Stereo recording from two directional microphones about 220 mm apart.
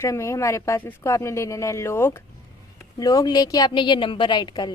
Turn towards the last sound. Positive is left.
turn(degrees=20)  # may be behind; listen again after turning